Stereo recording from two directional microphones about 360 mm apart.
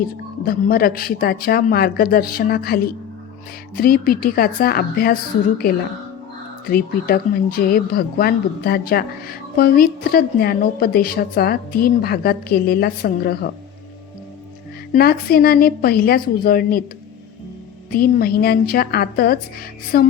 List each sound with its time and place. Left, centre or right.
0.4 s speech: left
6.7 s speech: left
14.9 s speech: left
17.9 s speech: left